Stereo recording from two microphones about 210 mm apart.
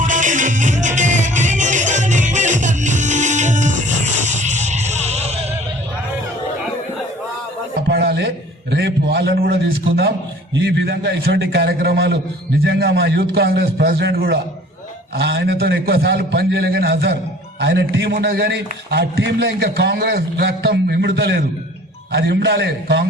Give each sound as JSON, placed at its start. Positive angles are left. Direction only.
{"t": 0.0, "sound": "music", "side_deg": -35}
{"t": 7.9, "sound": "a sound", "side_deg": -50}
{"t": 8.7, "sound": "a man's voice", "side_deg": -55}
{"t": 17.6, "sound": "a man's voice", "side_deg": -65}